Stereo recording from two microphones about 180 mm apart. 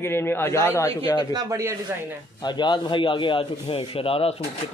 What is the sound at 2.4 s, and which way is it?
A man's voice, 25° left (ahead or behind).